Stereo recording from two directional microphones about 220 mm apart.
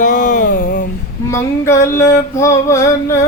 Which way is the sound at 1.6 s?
10° left (ahead or behind).